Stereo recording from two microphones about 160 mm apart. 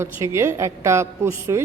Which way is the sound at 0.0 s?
15° right (ahead or behind).